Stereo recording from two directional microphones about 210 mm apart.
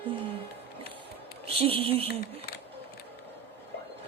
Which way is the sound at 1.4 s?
25° right (ahead or behind).